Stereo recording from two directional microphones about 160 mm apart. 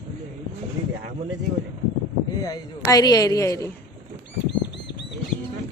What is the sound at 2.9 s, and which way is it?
Speech, 25° left (ahead or behind).